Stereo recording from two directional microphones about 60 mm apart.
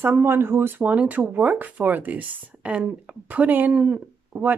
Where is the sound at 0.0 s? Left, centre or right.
Right.